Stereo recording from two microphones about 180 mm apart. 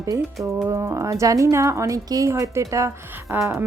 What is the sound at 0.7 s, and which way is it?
Speech, 15° right (ahead or behind).